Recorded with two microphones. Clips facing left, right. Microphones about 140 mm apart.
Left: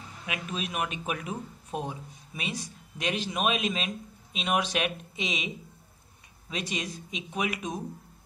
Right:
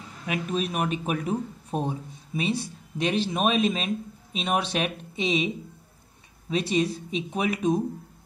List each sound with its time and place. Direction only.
0.3 s speech: 35° right (ahead or behind)
6.5 s speech: 35° right (ahead or behind)